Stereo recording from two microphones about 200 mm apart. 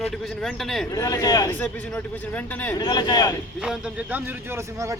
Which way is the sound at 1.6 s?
5° left (ahead or behind).